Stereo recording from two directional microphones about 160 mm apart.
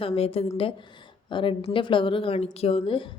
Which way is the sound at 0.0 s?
35° left (ahead or behind).